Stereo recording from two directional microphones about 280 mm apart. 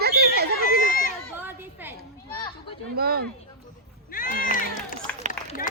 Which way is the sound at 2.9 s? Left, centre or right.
Right.